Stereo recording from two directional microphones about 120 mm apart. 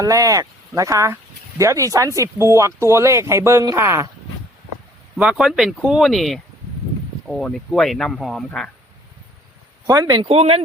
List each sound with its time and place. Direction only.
0.0 s speech: 30° right (ahead or behind)
5.1 s speech: 5° right (ahead or behind)
9.8 s speech: 30° right (ahead or behind)
10.2 s speech: 55° right (ahead or behind)